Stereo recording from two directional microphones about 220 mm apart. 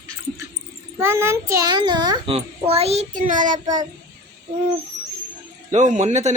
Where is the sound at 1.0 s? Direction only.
10° right (ahead or behind); by 3.5 s 35° right (ahead or behind).